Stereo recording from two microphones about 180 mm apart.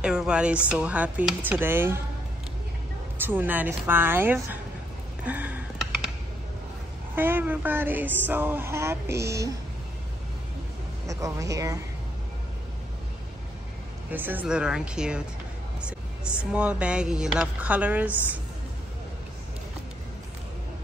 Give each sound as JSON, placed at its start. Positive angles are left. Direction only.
{"t": 0.0, "sound": "speech", "side_deg": -5}
{"t": 3.2, "sound": "speech", "side_deg": -10}
{"t": 5.2, "sound": "computer keyboard", "side_deg": -10}
{"t": 7.2, "sound": "speech", "side_deg": -10}
{"t": 11.1, "sound": "speech", "side_deg": -15}
{"t": 14.1, "sound": "speech", "side_deg": -10}